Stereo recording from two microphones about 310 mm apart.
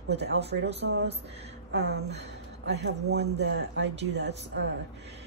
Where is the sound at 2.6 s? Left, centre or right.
Right.